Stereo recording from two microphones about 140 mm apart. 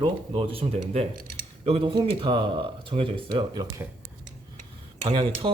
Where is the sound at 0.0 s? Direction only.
40° right (ahead or behind).